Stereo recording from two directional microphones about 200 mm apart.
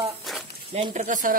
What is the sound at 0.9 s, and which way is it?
Speech, 40° right (ahead or behind).